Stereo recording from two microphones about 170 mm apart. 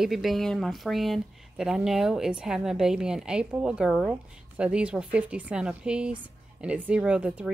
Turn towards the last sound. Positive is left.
turn(degrees=-5)  # may be behind; listen again after turning